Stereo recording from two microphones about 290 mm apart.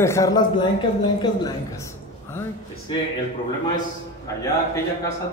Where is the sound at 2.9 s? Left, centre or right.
Centre.